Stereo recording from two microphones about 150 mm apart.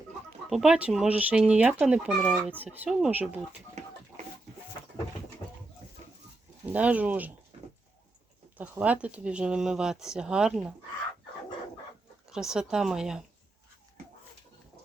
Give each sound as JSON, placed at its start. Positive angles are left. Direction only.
{"t": 0.5, "sound": "speech", "side_deg": -5}
{"t": 2.1, "sound": "speech", "side_deg": 5}
{"t": 2.4, "sound": "speech", "side_deg": -10}
{"t": 3.8, "sound": "chicken", "side_deg": -50}
{"t": 6.7, "sound": "speech", "side_deg": -10}
{"t": 8.5, "sound": "speech", "side_deg": -10}
{"t": 12.3, "sound": "speech", "side_deg": -5}